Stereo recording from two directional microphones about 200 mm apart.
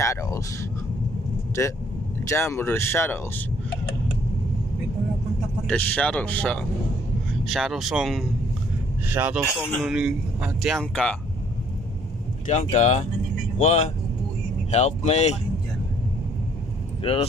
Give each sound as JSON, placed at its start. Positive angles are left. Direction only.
{"t": 0.0, "sound": "a sound", "side_deg": 15}
{"t": 2.2, "sound": "speech", "side_deg": 15}
{"t": 5.7, "sound": "a man's voice", "side_deg": 5}
{"t": 12.4, "sound": "speech", "side_deg": 35}
{"t": 17.0, "sound": "speech", "side_deg": 30}